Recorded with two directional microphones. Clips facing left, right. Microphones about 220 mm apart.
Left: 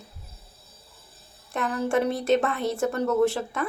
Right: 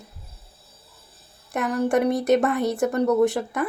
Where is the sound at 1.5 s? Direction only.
15° right (ahead or behind).